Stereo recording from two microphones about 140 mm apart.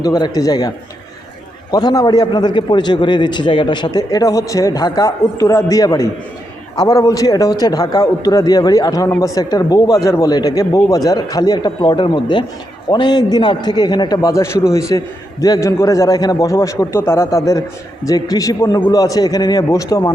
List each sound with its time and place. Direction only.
0.0 s a man's voice: 25° left (ahead or behind)
1.7 s a man's voice: 25° left (ahead or behind)